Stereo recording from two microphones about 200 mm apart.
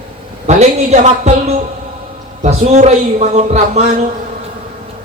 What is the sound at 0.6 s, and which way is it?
A man's voice, 35° right (ahead or behind).